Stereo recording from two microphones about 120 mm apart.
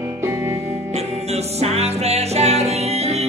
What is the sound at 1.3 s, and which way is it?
Music, 60° right (ahead or behind).